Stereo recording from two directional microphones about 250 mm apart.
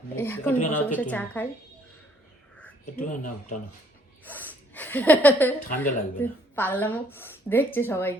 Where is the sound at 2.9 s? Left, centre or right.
Left.